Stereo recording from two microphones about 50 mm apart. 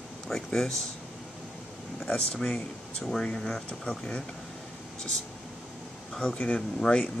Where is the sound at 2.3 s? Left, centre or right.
Centre.